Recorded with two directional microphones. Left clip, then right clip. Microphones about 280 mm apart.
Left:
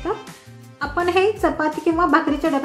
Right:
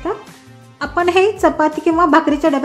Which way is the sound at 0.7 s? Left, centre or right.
Right.